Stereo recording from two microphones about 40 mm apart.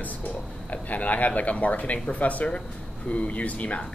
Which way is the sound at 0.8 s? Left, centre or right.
Left.